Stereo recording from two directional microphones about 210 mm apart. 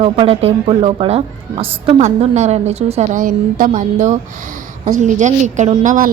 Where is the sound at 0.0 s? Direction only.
25° right (ahead or behind).